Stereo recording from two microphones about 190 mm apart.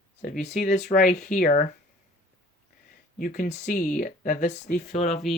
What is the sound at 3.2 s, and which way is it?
Speech, 45° left (ahead or behind).